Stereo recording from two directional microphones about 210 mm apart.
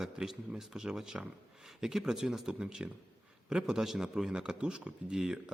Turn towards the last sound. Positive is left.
turn(degrees=0)  # may be behind; listen again after turning